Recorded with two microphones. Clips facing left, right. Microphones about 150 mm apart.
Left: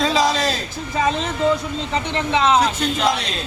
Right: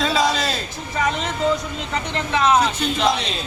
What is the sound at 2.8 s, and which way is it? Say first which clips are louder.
Speech: even; centre (ahead or behind).